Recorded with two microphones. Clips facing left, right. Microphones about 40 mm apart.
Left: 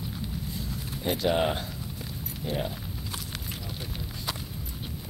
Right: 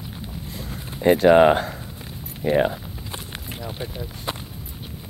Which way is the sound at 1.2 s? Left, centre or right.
Right.